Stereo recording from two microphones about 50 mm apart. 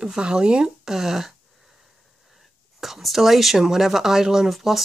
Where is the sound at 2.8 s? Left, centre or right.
Centre.